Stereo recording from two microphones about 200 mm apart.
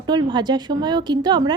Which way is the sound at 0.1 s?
20° right (ahead or behind).